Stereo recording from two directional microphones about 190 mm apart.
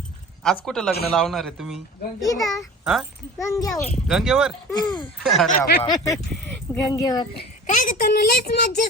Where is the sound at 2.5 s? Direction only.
Centre (ahead or behind).